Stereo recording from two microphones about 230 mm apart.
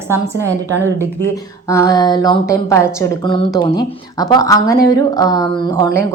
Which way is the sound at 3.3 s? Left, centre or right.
Left.